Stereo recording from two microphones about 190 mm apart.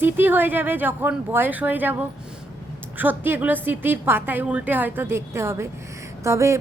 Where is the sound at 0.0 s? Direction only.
10° right (ahead or behind).